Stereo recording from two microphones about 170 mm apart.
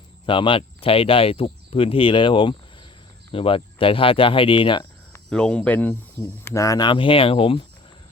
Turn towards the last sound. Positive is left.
turn(degrees=35)  # may be behind; listen again after turning